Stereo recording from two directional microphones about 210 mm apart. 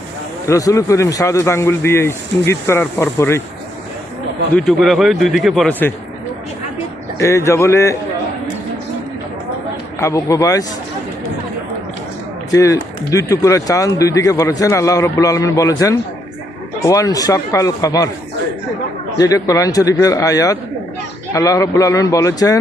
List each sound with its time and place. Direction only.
0.4 s speech: 15° left (ahead or behind)
4.5 s speech: centre (ahead or behind)
7.2 s speech: 15° left (ahead or behind)
10.0 s speech: 15° left (ahead or behind)
12.5 s speech: 15° left (ahead or behind)
19.1 s speech: 15° left (ahead or behind)